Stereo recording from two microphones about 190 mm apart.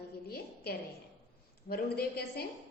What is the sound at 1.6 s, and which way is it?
Speech, 55° left (ahead or behind).